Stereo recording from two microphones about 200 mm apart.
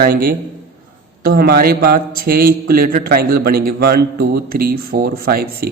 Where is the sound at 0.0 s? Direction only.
45° right (ahead or behind).